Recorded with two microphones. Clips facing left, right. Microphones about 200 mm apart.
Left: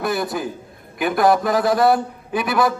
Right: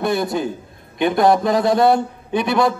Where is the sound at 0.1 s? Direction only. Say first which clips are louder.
Right 3 dB; 25° right (ahead or behind).